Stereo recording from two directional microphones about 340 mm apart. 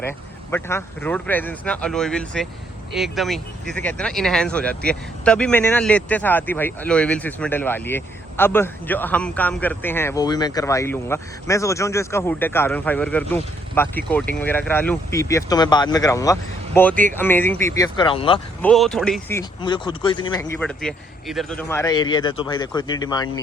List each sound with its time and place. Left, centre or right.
0.5 s speech: centre
16.9 s speech: right
17.2 s speech: centre
18.6 s speech: centre